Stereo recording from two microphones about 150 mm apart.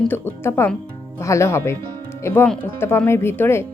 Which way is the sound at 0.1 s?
15° left (ahead or behind).